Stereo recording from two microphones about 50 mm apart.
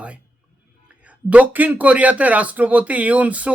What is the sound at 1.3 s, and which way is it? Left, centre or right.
Speech, right.